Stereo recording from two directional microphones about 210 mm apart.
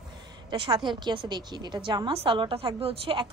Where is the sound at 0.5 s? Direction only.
20° right (ahead or behind).